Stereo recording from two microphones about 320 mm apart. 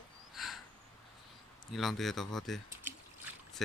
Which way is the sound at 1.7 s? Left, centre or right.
Centre.